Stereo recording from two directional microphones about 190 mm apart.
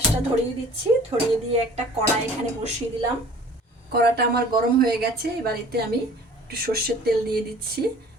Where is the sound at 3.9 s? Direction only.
55° right (ahead or behind).